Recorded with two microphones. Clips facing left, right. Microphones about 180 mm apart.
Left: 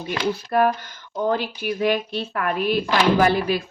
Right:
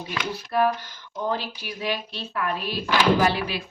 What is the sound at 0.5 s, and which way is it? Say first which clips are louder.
Speech: left 1 dB; 50° left (ahead or behind).